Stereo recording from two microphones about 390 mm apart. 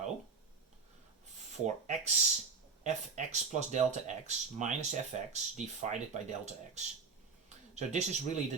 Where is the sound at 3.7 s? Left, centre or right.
Centre.